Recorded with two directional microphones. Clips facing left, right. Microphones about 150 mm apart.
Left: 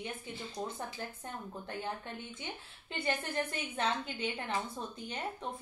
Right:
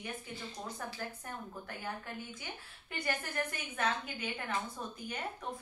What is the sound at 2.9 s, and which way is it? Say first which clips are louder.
A woman's voice: left 2 dB; 25° left (ahead or behind).